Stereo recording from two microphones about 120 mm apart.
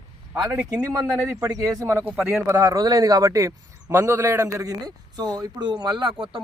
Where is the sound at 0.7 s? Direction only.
30° right (ahead or behind).